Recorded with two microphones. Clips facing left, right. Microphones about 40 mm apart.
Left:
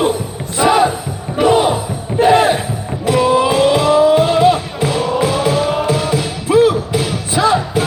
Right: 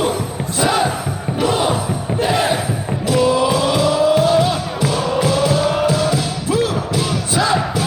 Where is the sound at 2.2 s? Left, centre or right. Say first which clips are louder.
Left 8 dB; left.